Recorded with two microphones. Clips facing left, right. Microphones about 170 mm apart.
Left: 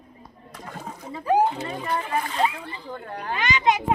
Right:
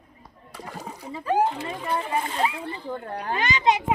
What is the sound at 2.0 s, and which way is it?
Speech, 25° right (ahead or behind).